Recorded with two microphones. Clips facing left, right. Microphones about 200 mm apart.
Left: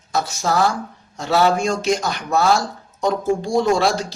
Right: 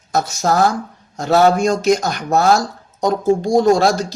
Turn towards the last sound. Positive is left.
turn(degrees=-45)  # may be behind; listen again after turning